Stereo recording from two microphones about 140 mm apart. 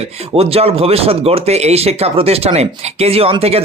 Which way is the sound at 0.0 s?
45° right (ahead or behind).